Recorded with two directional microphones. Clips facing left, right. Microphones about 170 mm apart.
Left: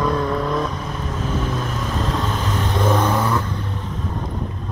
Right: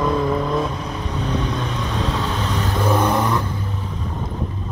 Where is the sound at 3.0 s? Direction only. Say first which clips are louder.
Right 1 dB; 15° right (ahead or behind).